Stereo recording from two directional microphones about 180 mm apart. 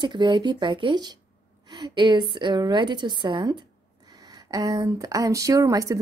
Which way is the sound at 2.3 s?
25° right (ahead or behind).